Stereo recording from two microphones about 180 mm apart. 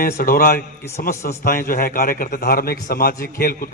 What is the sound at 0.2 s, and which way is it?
A man's voice, 55° left (ahead or behind).